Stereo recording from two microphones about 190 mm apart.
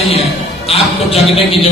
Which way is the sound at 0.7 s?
30° left (ahead or behind).